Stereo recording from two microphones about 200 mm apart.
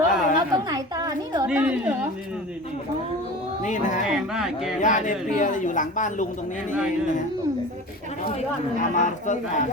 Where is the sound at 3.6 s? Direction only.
40° left (ahead or behind).